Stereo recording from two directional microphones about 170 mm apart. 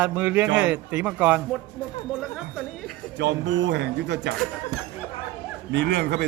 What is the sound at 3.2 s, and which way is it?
Speech, 90° right.